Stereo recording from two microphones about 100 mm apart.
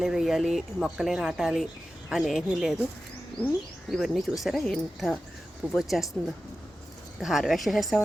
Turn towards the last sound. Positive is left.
turn(degrees=0)  # may be behind; listen again after turning